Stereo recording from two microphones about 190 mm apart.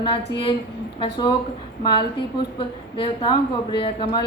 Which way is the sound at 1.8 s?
25° left (ahead or behind).